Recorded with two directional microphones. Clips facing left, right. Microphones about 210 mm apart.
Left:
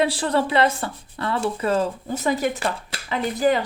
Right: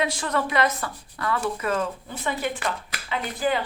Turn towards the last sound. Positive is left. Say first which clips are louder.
# left 5 dB
turn(degrees=40)  # may be behind; listen again after turning